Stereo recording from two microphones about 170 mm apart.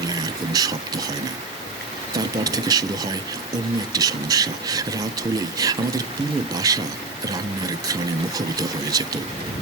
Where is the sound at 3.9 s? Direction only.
20° right (ahead or behind).